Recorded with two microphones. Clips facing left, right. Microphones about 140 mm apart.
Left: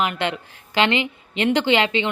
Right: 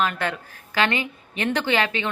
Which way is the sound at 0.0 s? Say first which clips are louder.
Left 1 dB; 20° left (ahead or behind).